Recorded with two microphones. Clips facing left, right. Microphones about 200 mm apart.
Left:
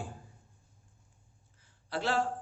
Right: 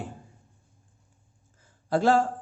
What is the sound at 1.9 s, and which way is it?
Speech, 45° right (ahead or behind).